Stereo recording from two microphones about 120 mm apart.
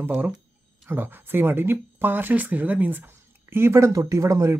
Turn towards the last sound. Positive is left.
turn(degrees=-25)  # may be behind; listen again after turning